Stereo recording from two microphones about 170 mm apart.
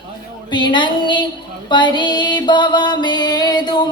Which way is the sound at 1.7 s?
25° left (ahead or behind).